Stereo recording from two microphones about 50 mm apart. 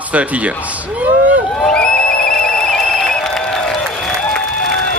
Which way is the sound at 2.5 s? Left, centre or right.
Centre.